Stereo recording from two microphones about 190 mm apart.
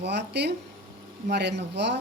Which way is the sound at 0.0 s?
60° right (ahead or behind).